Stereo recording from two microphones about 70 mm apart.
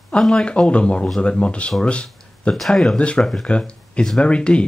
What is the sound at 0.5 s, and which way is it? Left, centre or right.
Speech, centre.